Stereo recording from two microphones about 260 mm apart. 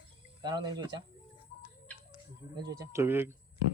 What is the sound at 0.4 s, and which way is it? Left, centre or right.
Speech, centre.